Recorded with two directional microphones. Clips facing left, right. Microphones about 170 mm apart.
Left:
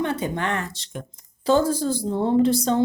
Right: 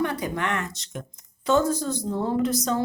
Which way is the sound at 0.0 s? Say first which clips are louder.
Left 2 dB; 25° left (ahead or behind).